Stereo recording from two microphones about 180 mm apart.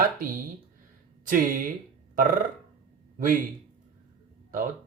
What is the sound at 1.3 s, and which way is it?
Speech, 50° right (ahead or behind).